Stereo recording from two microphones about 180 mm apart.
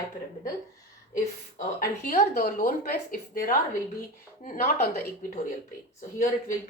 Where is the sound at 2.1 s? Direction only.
55° left (ahead or behind).